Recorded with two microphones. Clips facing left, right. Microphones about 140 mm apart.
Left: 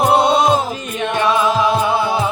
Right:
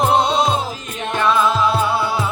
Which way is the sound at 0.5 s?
60° left (ahead or behind).